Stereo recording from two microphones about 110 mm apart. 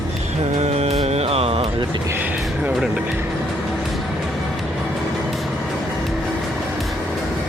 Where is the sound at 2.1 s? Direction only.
15° right (ahead or behind).